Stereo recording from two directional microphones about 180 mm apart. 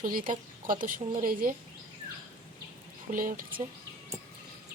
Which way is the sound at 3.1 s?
50° right (ahead or behind).